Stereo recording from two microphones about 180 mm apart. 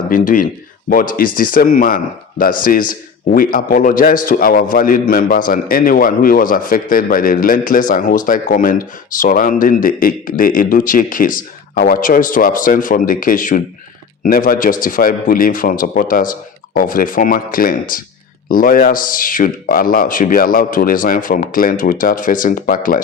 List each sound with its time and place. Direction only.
0.9 s speech: 50° left (ahead or behind)